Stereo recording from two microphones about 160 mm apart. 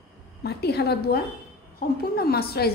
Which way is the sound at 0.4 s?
90° left.